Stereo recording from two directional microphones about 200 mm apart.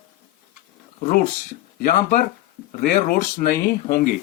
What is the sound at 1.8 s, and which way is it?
Speech, 50° left (ahead or behind).